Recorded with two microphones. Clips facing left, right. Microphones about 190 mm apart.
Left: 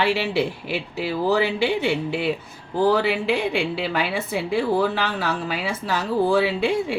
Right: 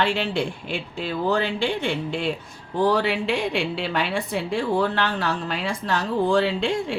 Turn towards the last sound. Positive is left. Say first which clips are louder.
# left 2 dB
turn(degrees=5)  # may be behind; listen again after turning